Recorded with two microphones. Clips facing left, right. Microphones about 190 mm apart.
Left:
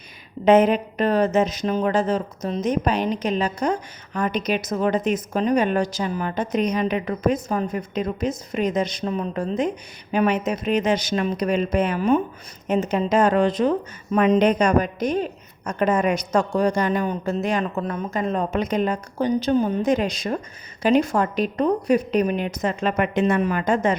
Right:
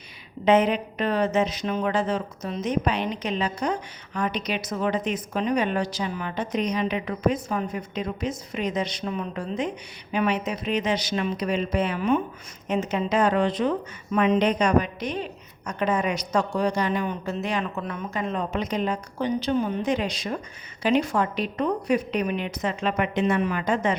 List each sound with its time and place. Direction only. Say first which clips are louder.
0.4 s a woman's voice: left 4 dB; 45° left (ahead or behind)